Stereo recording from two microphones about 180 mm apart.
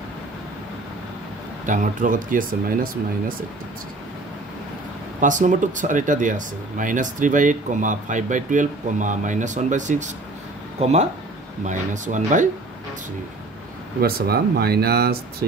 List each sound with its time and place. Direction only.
1.7 s speech: 45° right (ahead or behind)
5.2 s speech: 45° right (ahead or behind)
14.0 s speech: 60° right (ahead or behind)